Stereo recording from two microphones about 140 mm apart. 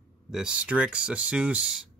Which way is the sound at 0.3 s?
5° right (ahead or behind).